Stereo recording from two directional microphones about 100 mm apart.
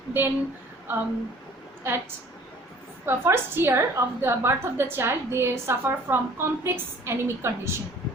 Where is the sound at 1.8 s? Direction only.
25° right (ahead or behind).